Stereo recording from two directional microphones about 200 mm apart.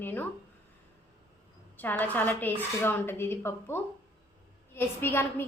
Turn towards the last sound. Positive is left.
turn(degrees=10)  # may be behind; listen again after turning